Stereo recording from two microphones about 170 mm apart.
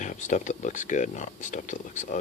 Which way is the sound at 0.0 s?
45° left (ahead or behind).